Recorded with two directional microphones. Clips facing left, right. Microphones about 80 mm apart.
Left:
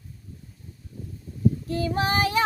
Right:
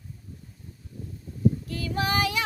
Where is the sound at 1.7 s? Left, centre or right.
Left.